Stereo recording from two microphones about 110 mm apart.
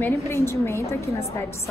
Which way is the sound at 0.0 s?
25° left (ahead or behind).